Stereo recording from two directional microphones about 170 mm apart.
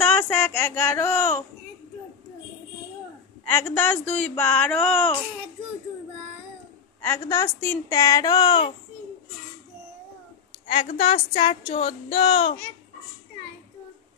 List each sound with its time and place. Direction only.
0.0 s a sound: 5° left (ahead or behind)
3.4 s speech: 10° left (ahead or behind)
7.0 s a woman's voice: 15° left (ahead or behind)
11.0 s a woman's voice: 30° left (ahead or behind)